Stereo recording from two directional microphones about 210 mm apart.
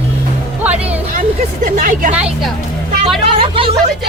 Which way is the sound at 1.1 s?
35° right (ahead or behind).